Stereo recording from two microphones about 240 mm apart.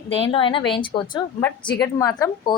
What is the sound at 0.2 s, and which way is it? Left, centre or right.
A woman's voice, left.